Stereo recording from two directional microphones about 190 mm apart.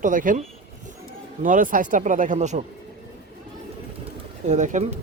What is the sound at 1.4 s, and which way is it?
Speech, 45° right (ahead or behind).